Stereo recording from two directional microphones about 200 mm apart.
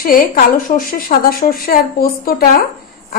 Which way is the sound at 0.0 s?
45° left (ahead or behind).